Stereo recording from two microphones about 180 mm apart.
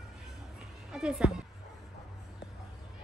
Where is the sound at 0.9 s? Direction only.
5° right (ahead or behind).